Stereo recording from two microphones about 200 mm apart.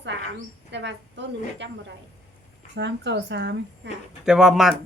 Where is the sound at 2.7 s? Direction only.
60° right (ahead or behind).